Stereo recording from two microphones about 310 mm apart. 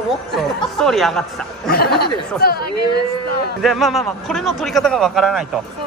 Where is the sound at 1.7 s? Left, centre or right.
Left.